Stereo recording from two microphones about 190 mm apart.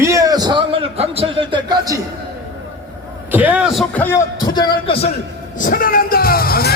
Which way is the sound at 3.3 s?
10° right (ahead or behind).